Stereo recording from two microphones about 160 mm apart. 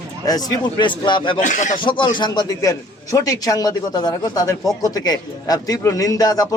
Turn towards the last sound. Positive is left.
turn(degrees=20)  # may be behind; listen again after turning